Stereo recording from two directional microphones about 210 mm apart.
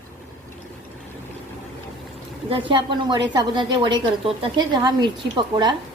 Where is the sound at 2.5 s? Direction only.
25° right (ahead or behind).